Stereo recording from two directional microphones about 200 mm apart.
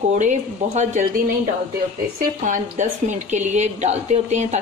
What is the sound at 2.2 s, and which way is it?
A woman's voice, 40° right (ahead or behind).